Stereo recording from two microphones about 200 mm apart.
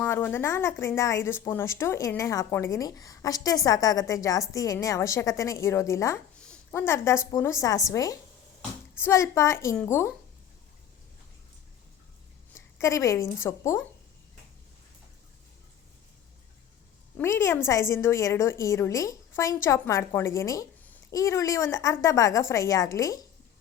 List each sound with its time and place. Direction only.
0.0 s speech: 10° left (ahead or behind)
12.5 s speech: 15° left (ahead or behind)
17.2 s speech: 15° left (ahead or behind)